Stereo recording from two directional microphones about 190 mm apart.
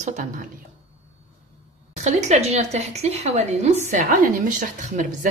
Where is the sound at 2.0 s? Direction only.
35° right (ahead or behind).